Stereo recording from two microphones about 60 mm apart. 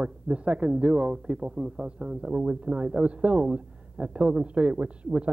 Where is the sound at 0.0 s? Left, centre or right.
Centre.